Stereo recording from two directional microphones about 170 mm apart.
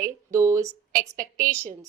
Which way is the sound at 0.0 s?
20° right (ahead or behind).